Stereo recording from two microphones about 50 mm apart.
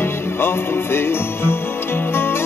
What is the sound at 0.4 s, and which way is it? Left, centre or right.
Music, left.